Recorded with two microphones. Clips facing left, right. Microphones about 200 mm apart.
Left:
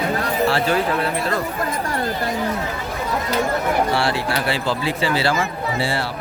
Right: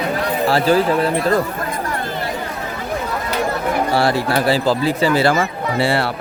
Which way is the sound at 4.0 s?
40° right (ahead or behind).